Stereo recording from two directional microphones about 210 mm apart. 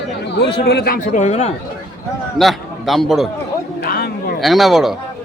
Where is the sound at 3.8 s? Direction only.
45° left (ahead or behind).